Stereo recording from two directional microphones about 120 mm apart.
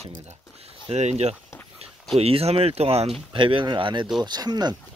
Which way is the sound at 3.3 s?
45° right (ahead or behind).